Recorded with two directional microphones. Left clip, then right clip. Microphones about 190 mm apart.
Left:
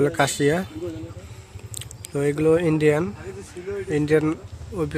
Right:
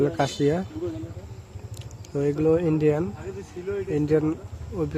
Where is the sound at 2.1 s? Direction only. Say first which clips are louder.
Left 2 dB; 5° left (ahead or behind).